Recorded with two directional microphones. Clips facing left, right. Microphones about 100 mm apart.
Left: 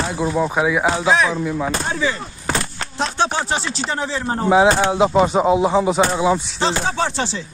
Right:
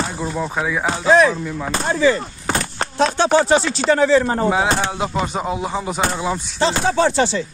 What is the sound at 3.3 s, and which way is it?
Speech, 85° right.